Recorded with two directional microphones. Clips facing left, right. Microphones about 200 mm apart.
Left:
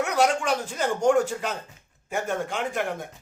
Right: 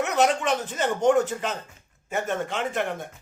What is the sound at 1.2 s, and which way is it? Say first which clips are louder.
Speech: even; 10° left (ahead or behind).